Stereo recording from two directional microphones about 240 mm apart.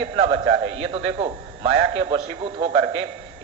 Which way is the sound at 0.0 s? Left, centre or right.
Right.